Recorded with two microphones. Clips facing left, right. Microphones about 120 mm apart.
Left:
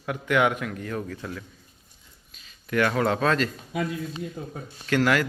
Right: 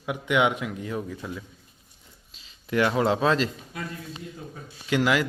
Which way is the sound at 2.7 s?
20° right (ahead or behind).